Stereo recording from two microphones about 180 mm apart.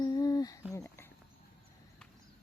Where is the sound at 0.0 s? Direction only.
20° left (ahead or behind).